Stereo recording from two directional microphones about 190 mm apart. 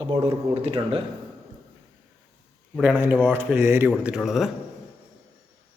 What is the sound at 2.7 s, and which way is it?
Speech, 10° right (ahead or behind).